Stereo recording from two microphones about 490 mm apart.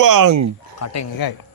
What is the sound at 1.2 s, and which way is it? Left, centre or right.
Speech, left.